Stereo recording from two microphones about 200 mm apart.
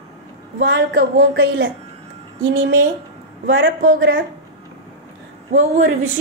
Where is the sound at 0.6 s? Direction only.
60° right (ahead or behind).